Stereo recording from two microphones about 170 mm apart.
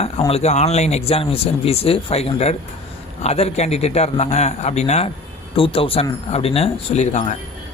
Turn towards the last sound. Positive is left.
turn(degrees=45)  # may be behind; listen again after turning